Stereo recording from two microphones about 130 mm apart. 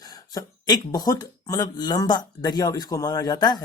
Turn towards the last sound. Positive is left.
turn(degrees=30)  # may be behind; listen again after turning